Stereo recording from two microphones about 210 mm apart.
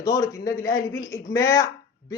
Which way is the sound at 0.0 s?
15° left (ahead or behind).